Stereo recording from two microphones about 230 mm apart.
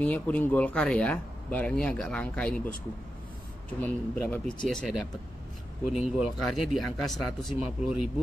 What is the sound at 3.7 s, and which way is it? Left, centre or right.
Speech, centre.